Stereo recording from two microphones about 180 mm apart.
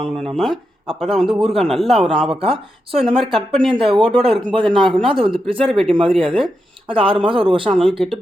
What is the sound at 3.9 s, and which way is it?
Speech, 5° left (ahead or behind).